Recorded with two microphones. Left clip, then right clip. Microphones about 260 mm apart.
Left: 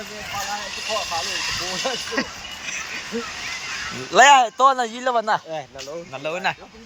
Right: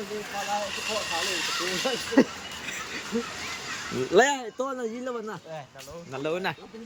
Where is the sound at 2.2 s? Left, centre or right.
Centre.